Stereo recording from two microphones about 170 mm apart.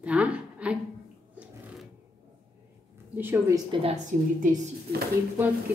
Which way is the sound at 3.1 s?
10° right (ahead or behind).